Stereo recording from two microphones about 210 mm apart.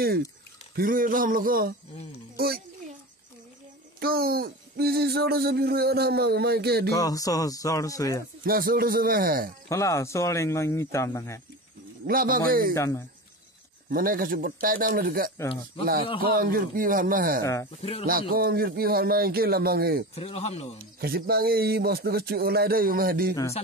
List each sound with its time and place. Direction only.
0.7 s a sound: 40° right (ahead or behind)
2.3 s a child's voice: 45° right (ahead or behind)
4.0 s speech: 45° right (ahead or behind)
6.9 s speech: 15° left (ahead or behind)
8.5 s speech: 45° right (ahead or behind)
9.7 s speech: 15° left (ahead or behind)
12.1 s speech: 45° right (ahead or behind)
12.7 s speech: 15° left (ahead or behind)
13.8 s speech: 45° right (ahead or behind)
17.4 s speech: 15° left (ahead or behind)
18.0 s speech: 45° right (ahead or behind)
20.2 s speech: 30° left (ahead or behind)
21.0 s speech: 45° right (ahead or behind)